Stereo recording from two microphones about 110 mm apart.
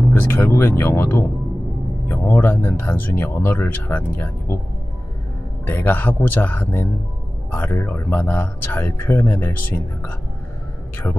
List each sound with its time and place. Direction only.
0.1 s speech: 20° left (ahead or behind)
5.7 s speech: 20° left (ahead or behind)